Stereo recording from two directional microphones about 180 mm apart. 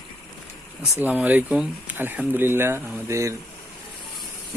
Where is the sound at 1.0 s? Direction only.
10° right (ahead or behind).